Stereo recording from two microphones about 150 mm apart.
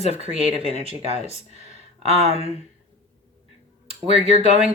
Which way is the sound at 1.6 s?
45° right (ahead or behind).